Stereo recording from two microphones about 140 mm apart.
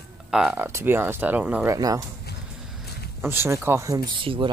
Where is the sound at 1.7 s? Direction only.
25° right (ahead or behind).